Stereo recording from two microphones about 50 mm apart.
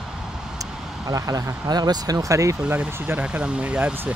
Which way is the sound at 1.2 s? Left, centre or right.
Right.